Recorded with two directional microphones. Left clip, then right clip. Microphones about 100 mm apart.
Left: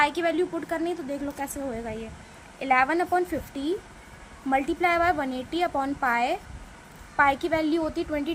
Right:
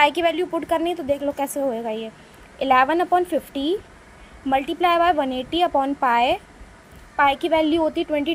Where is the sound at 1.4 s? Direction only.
65° right (ahead or behind).